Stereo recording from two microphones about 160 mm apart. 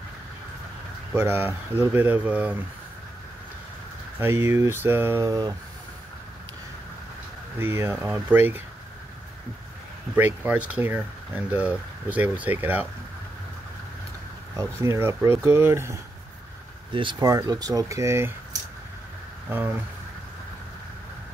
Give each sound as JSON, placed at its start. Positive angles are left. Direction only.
{"t": 1.1, "sound": "speech", "side_deg": -15}
{"t": 4.2, "sound": "speech", "side_deg": -15}
{"t": 7.5, "sound": "speech", "side_deg": -15}
{"t": 10.1, "sound": "speech", "side_deg": -10}
{"t": 14.6, "sound": "speech", "side_deg": -15}
{"t": 16.9, "sound": "speech", "side_deg": -30}
{"t": 19.5, "sound": "speech", "side_deg": -10}